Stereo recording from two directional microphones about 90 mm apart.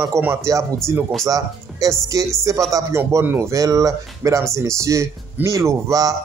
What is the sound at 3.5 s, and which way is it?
Speech, 40° right (ahead or behind).